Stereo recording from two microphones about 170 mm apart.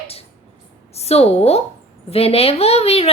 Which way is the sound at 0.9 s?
35° left (ahead or behind).